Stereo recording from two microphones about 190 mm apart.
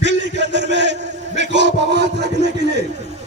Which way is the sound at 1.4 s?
70° right (ahead or behind).